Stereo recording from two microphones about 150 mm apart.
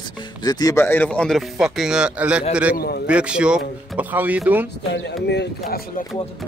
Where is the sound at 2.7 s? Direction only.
90° left.